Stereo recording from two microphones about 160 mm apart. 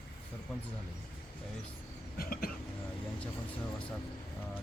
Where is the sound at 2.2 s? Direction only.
65° left (ahead or behind).